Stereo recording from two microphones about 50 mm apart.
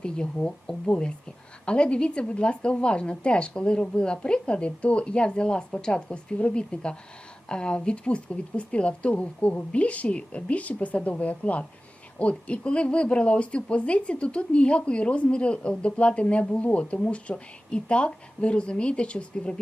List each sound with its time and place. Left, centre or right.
0.0 s speech: left